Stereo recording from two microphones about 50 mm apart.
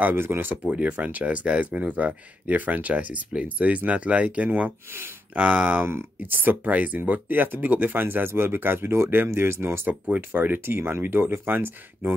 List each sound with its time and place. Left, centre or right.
0.0 s speech: right
0.7 s speech: right
4.9 s speech: right
5.4 s speech: right
9.8 s speech: right
10.3 s speech: right